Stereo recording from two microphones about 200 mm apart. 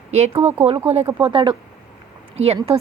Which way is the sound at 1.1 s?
5° right (ahead or behind).